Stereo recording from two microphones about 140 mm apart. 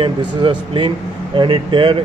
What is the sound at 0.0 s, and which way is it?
Speech, 35° right (ahead or behind).